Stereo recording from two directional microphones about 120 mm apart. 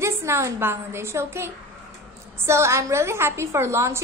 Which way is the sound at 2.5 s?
25° right (ahead or behind).